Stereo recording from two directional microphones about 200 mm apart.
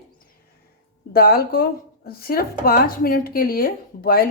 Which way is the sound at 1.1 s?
50° left (ahead or behind).